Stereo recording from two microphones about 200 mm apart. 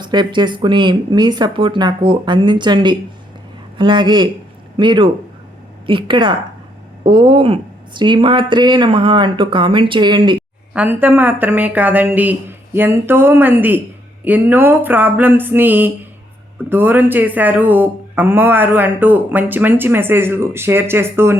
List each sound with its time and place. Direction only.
0.0 s speech: 20° right (ahead or behind)
10.8 s speech: 10° right (ahead or behind)